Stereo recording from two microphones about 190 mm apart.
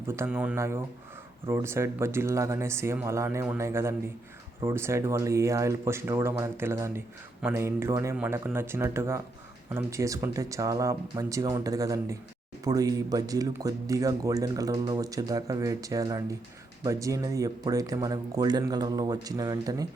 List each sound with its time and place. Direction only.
0.1 s speech: 10° right (ahead or behind)